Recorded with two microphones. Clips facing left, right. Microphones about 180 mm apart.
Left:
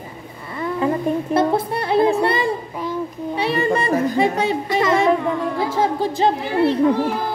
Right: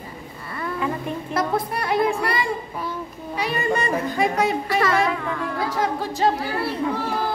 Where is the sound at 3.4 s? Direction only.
30° left (ahead or behind).